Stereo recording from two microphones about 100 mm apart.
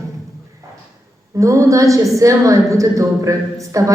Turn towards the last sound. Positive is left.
turn(degrees=-35)  # may be behind; listen again after turning